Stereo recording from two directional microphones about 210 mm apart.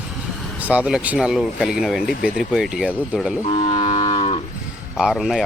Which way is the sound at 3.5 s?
20° left (ahead or behind).